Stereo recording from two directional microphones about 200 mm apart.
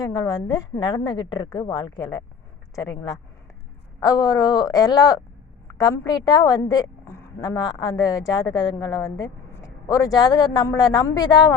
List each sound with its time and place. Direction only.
0.0 s a woman's voice: 20° left (ahead or behind)